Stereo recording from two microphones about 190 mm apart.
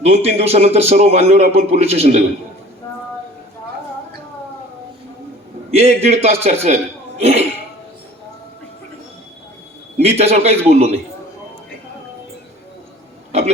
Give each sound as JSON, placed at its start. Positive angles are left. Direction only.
{"t": 0.0, "sound": "a man's voice", "side_deg": -35}
{"t": 5.7, "sound": "a man's voice", "side_deg": -35}
{"t": 10.0, "sound": "a man's voice", "side_deg": -35}